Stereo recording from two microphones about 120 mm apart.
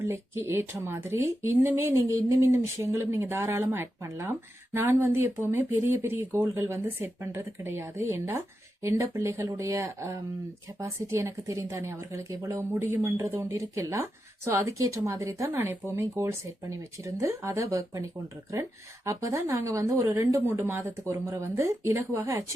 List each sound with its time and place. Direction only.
0.0 s speech: 20° right (ahead or behind)
19.0 s speech: 25° right (ahead or behind)